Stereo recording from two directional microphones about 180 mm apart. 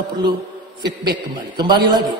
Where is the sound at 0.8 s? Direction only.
65° right (ahead or behind).